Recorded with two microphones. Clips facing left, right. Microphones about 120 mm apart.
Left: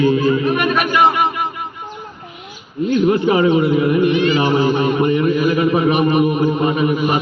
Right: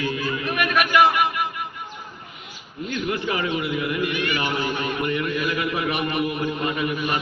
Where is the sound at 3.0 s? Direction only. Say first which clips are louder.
Left 11 dB; 30° left (ahead or behind).